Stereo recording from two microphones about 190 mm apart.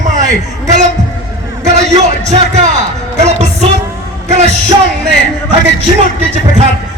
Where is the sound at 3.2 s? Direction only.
35° right (ahead or behind).